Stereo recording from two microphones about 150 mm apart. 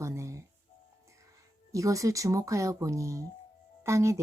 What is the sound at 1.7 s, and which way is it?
Speech, 20° right (ahead or behind).